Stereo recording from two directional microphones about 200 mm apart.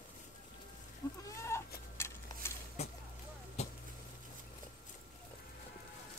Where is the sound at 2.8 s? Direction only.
35° left (ahead or behind).